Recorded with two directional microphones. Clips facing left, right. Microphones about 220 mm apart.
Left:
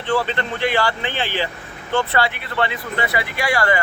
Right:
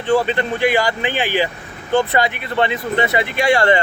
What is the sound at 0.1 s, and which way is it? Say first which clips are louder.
Speech: right 5 dB; 15° right (ahead or behind).